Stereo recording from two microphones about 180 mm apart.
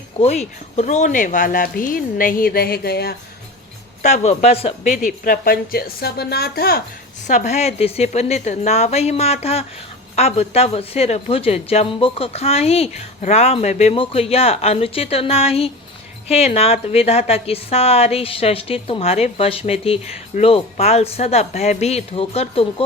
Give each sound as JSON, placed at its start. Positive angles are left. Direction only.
{"t": 0.2, "sound": "speech", "side_deg": 35}
{"t": 4.0, "sound": "speech", "side_deg": 40}
{"t": 7.3, "sound": "a woman's voice", "side_deg": 40}